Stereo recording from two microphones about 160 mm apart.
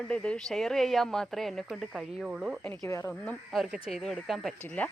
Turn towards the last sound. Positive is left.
turn(degrees=10)  # may be behind; listen again after turning